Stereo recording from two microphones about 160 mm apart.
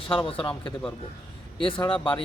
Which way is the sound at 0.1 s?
35° left (ahead or behind).